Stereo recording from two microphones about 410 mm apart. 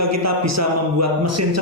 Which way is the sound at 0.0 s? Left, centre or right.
Right.